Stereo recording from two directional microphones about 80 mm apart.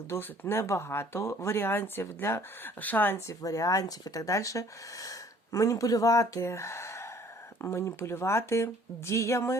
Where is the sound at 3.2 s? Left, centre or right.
Left.